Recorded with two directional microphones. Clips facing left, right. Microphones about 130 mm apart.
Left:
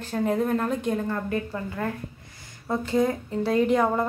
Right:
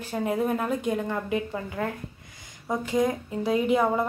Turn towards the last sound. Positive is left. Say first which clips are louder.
# left 2 dB
turn(degrees=-5)  # may be behind; listen again after turning